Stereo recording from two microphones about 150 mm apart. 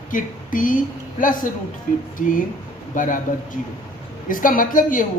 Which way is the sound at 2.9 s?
60° left (ahead or behind).